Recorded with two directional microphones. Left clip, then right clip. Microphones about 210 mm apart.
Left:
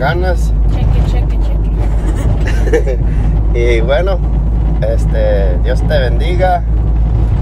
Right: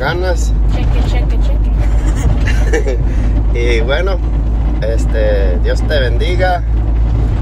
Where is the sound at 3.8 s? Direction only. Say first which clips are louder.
Left 3 dB; 15° left (ahead or behind).